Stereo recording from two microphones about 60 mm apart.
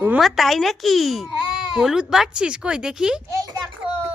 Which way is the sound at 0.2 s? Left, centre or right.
Centre.